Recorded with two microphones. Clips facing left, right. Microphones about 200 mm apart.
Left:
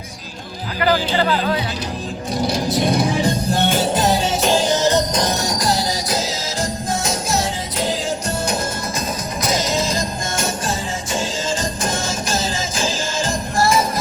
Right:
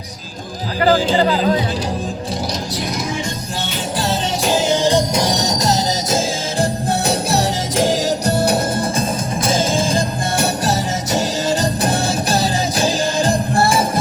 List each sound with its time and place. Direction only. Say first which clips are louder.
0.9 s speech: right 3 dB; 30° right (ahead or behind)
2.9 s music: left 5 dB; 30° left (ahead or behind)
3.6 s music: left 8 dB; 50° left (ahead or behind)
3.9 s music: left 3 dB; 20° left (ahead or behind)
4.5 s music: right 3 dB; 15° right (ahead or behind)
6.6 s music: right 4 dB; 60° right (ahead or behind)
7.3 s music: right 5 dB; 40° right (ahead or behind)
10.3 s music: right 6 dB; 65° right (ahead or behind)
11.8 s music: right 5 dB; 35° right (ahead or behind)
12.4 s music: right 5 dB; 60° right (ahead or behind)
13.7 s music: right 1 dB; 30° right (ahead or behind)